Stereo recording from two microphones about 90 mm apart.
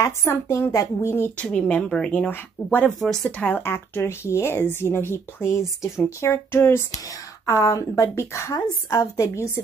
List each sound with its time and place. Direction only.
0.0 s speech: 30° left (ahead or behind)
1.4 s a woman's voice: 15° left (ahead or behind)
7.4 s speech: 40° left (ahead or behind)